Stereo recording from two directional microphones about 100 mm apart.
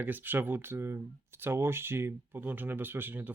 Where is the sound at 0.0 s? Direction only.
20° right (ahead or behind).